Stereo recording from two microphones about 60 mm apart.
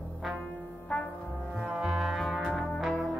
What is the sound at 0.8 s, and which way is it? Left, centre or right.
Music, left.